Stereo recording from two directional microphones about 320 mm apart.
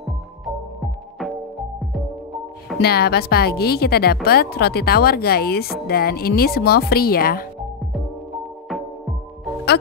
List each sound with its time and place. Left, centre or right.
2.8 s speech: left